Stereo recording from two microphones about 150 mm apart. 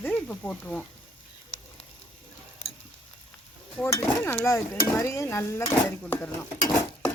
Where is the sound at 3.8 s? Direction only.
15° left (ahead or behind).